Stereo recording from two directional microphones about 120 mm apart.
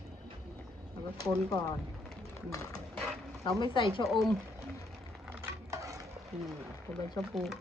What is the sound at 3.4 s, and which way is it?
Speech, 40° left (ahead or behind).